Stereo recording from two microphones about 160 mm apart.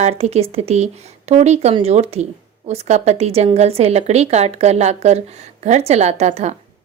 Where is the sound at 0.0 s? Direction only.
40° right (ahead or behind).